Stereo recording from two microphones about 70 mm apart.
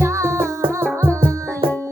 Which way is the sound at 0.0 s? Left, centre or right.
Right.